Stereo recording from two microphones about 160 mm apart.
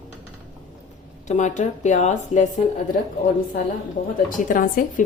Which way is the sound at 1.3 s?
50° left (ahead or behind).